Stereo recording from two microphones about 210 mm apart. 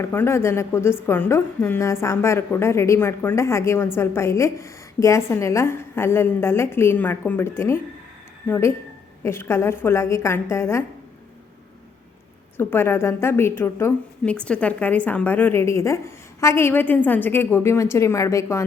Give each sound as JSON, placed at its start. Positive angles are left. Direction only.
{"t": 0.0, "sound": "a woman's voice", "side_deg": 10}
{"t": 12.5, "sound": "a woman's voice", "side_deg": 10}